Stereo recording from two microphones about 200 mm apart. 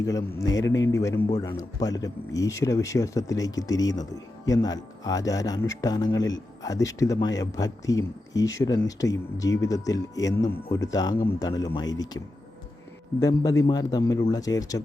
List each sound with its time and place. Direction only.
0.0 s speech: 15° left (ahead or behind)